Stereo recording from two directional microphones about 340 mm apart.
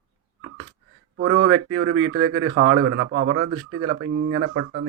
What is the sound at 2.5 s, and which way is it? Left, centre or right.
Speech, right.